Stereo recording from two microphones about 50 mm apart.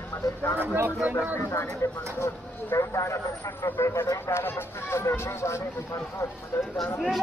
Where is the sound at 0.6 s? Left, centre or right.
Right.